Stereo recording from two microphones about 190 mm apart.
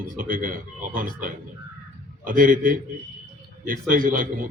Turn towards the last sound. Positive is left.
turn(degrees=-45)  # may be behind; listen again after turning